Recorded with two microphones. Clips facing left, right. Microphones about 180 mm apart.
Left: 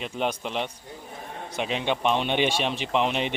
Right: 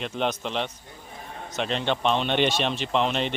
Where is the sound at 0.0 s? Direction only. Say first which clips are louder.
Right 1 dB; 10° left (ahead or behind).